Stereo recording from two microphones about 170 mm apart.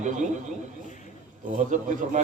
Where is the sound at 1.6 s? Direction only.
45° right (ahead or behind).